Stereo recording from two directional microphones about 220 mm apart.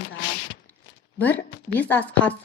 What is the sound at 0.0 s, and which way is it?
Zipper, 50° left (ahead or behind).